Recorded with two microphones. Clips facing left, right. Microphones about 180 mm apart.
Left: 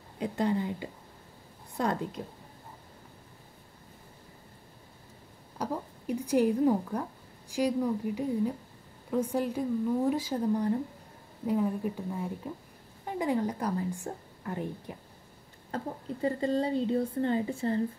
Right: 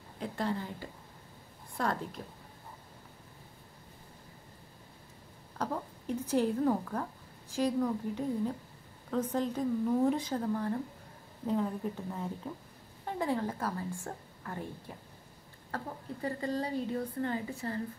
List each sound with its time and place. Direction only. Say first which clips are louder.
0.2 s a woman's voice: left 6 dB; 15° left (ahead or behind)
5.6 s a woman's voice: left 2 dB; 15° left (ahead or behind)